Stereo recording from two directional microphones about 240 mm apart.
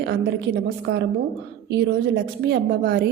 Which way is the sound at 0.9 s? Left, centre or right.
Right.